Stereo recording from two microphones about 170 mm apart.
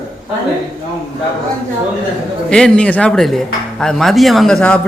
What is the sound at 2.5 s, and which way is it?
Speech, 5° left (ahead or behind).